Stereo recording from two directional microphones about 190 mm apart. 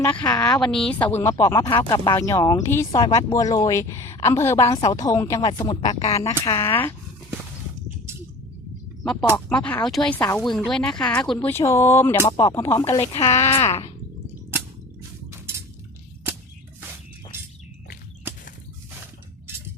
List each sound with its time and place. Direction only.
0.0 s speech: 5° left (ahead or behind)
0.3 s speech: 20° left (ahead or behind)
0.6 s speech: 5° left (ahead or behind)
5.4 s speech: 25° left (ahead or behind)
6.1 s speech: 15° left (ahead or behind)
9.5 s speech: 5° left (ahead or behind)
11.3 s speech: 15° left (ahead or behind)
13.1 s speech: 30° left (ahead or behind)